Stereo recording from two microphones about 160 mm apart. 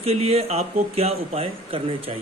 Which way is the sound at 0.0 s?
40° right (ahead or behind).